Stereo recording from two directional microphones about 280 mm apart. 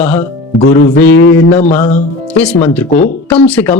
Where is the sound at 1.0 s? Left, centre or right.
Left.